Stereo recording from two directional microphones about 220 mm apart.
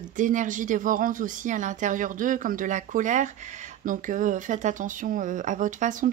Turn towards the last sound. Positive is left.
turn(degrees=-35)  # may be behind; listen again after turning